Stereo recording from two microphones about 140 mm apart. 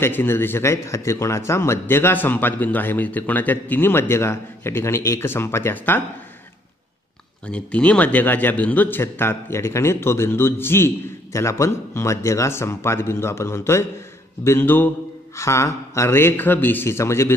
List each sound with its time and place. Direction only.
0.0 s a man's voice: 15° left (ahead or behind)
7.4 s a man's voice: 10° left (ahead or behind)